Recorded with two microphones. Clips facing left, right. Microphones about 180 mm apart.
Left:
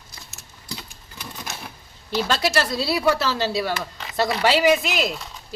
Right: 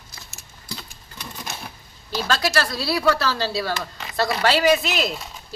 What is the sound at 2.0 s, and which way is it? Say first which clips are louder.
Speech: left 1 dB; 20° left (ahead or behind).